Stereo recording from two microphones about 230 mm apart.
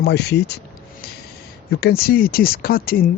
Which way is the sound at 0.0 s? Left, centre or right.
Left.